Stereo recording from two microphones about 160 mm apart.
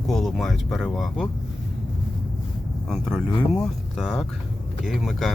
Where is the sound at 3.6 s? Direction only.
Centre (ahead or behind).